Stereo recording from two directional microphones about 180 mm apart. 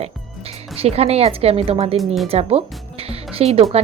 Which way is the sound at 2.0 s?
Centre (ahead or behind).